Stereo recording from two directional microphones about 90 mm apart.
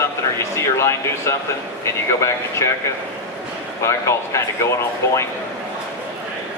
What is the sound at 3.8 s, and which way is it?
Speech, 30° left (ahead or behind).